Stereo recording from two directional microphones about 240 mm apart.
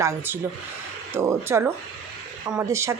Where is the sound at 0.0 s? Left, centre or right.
Centre.